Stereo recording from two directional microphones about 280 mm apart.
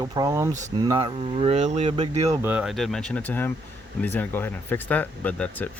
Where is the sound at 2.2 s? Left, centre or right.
Centre.